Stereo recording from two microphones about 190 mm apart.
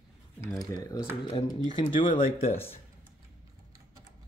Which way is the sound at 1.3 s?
30° left (ahead or behind).